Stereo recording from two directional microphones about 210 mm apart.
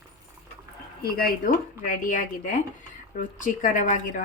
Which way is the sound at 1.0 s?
45° left (ahead or behind).